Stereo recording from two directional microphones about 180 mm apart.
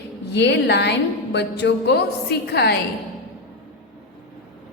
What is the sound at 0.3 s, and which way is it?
A woman's voice, 70° left (ahead or behind).